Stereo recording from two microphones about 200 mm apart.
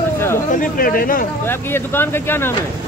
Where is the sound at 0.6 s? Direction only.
45° left (ahead or behind).